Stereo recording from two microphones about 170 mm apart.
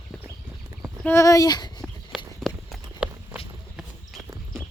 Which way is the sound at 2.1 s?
Centre (ahead or behind).